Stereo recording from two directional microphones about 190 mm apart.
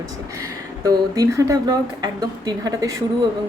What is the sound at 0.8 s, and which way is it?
Speech, 20° right (ahead or behind).